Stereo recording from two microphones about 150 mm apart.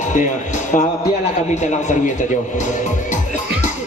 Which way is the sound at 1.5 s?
55° left (ahead or behind).